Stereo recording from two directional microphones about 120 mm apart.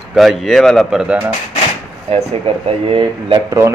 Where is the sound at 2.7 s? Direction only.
50° right (ahead or behind).